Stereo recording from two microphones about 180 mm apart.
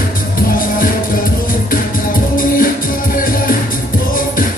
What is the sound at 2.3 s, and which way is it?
Music, 50° left (ahead or behind).